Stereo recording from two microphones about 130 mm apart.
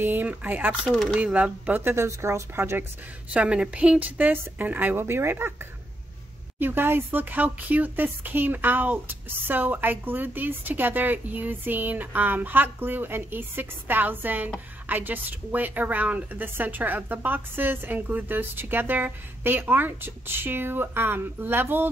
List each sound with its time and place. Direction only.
0.0 s speech: 15° right (ahead or behind)
0.8 s speech: centre (ahead or behind)
1.2 s speech: 10° right (ahead or behind)
3.3 s speech: 10° right (ahead or behind)
6.6 s speech: 15° right (ahead or behind)